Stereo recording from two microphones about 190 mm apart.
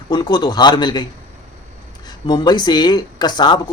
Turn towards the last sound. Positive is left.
turn(degrees=20)  # may be behind; listen again after turning